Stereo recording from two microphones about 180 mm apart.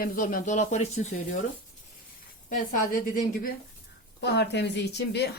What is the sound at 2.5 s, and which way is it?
A woman's voice, 50° left (ahead or behind).